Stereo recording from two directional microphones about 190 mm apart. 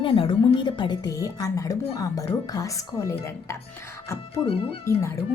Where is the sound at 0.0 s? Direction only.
25° left (ahead or behind).